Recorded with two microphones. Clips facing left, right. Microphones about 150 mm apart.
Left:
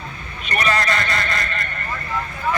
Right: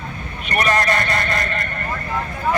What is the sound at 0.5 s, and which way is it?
Speech, 50° right (ahead or behind).